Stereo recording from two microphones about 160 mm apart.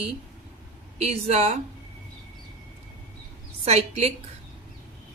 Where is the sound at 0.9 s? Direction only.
40° right (ahead or behind).